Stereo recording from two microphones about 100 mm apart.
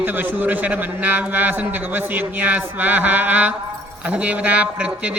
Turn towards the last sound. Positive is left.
turn(degrees=-15)  # may be behind; listen again after turning